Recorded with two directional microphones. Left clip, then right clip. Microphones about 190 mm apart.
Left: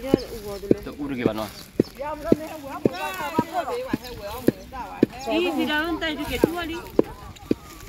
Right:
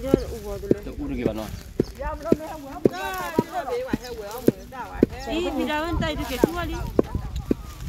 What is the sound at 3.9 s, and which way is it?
Speech, 45° right (ahead or behind).